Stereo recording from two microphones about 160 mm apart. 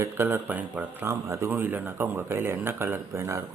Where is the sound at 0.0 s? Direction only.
15° right (ahead or behind).